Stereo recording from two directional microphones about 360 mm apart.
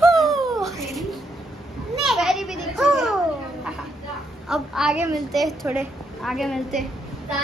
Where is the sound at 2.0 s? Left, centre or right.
Centre.